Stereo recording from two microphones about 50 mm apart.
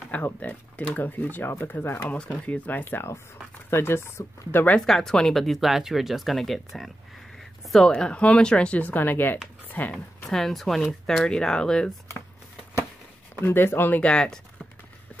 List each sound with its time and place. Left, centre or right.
0.1 s speech: left
2.0 s speech: left
3.7 s speech: left
4.7 s speech: centre
7.3 s a sound: centre
7.8 s speech: centre
8.8 s speech: left
9.9 s speech: centre
13.5 s speech: left
14.0 s speech: centre